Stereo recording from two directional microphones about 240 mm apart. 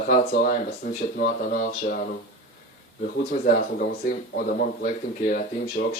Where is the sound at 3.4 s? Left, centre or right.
Left.